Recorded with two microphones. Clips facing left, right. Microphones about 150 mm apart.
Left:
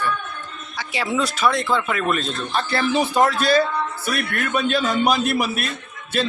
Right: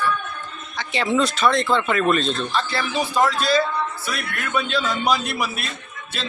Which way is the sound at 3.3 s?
50° left (ahead or behind).